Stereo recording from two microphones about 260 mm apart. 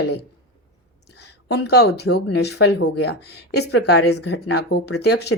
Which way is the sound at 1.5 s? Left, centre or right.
Left.